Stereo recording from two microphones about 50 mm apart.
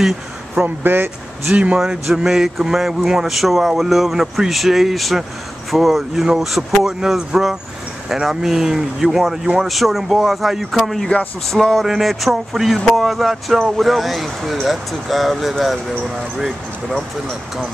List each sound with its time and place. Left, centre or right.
0.6 s speech: right
1.5 s speech: right
1.8 s a man's voice: centre